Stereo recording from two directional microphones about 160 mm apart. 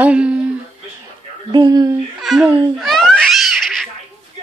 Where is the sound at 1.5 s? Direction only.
25° right (ahead or behind).